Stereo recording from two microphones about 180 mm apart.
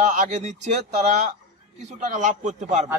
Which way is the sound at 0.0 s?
45° right (ahead or behind).